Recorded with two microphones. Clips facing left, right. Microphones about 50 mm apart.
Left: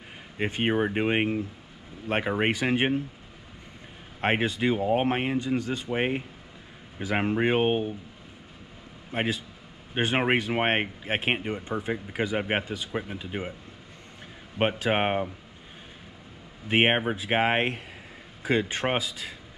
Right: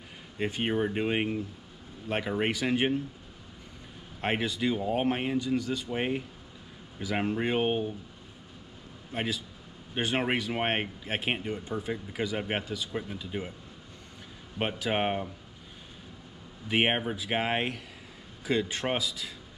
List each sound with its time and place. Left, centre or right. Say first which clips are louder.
0.4 s speech: left 3 dB; left
4.2 s speech: left 4 dB; left
9.1 s speech: left 4 dB; left
14.6 s speech: left 4 dB; left
16.6 s speech: left 4 dB; left